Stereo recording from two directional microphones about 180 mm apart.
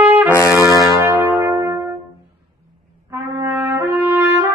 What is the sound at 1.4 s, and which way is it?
Brass instrument, 20° right (ahead or behind).